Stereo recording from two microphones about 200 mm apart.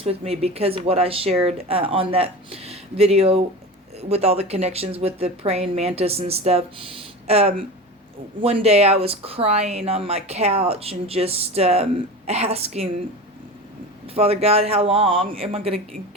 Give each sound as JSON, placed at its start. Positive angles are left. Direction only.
{"t": 0.0, "sound": "speech", "side_deg": -30}
{"t": 14.1, "sound": "speech", "side_deg": -30}